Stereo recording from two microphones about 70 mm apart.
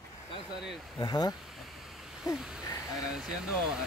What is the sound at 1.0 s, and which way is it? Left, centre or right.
Speech, left.